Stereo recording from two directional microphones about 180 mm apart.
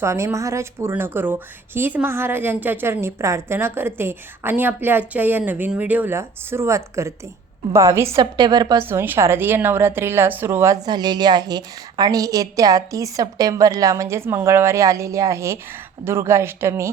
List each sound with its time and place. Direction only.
0.0 s a woman's voice: 15° right (ahead or behind)